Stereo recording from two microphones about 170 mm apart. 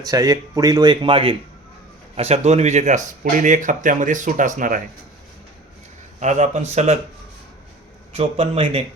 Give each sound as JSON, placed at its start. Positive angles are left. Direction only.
{"t": 0.1, "sound": "speech", "side_deg": -20}
{"t": 6.1, "sound": "speech", "side_deg": -40}
{"t": 8.1, "sound": "speech", "side_deg": -30}